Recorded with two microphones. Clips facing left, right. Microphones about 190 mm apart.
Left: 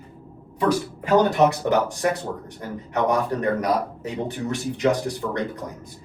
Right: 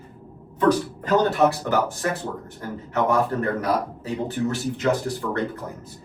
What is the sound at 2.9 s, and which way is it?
A man's voice, 15° left (ahead or behind).